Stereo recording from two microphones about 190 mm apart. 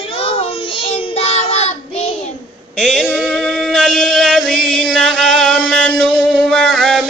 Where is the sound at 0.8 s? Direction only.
30° left (ahead or behind).